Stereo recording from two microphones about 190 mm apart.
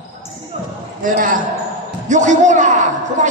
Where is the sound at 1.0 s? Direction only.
45° right (ahead or behind).